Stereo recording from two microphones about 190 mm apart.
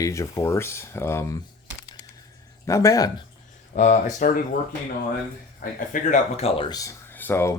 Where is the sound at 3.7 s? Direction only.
40° left (ahead or behind).